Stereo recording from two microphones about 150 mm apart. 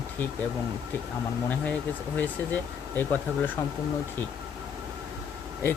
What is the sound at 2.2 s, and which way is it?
Speech, 10° left (ahead or behind).